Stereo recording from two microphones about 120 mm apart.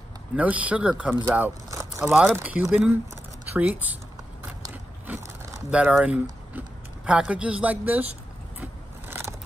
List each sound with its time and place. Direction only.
0.4 s speech: 10° right (ahead or behind)
1.7 s a sound: 25° right (ahead or behind)
2.0 s speech: 5° right (ahead or behind)
5.7 s speech: 10° right (ahead or behind)